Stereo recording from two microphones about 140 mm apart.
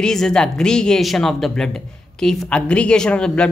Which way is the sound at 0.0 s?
5° left (ahead or behind).